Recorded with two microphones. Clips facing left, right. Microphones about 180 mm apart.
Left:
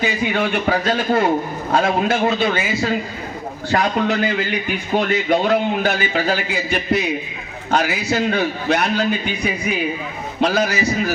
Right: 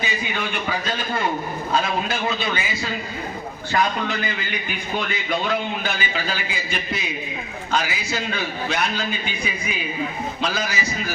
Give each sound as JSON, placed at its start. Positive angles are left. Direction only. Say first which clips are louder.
{"t": 0.7, "sound": "a man's voice", "louder": "left 9 dB", "side_deg": 65}
{"t": 3.7, "sound": "a man's voice", "louder": "left 4 dB", "side_deg": 65}